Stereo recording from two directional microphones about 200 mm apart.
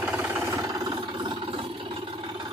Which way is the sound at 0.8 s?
25° right (ahead or behind).